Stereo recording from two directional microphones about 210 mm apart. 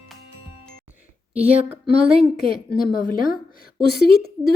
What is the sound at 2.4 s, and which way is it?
A woman's voice, 45° left (ahead or behind).